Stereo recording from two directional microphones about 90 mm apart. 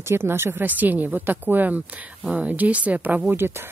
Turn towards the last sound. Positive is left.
turn(degrees=-25)  # may be behind; listen again after turning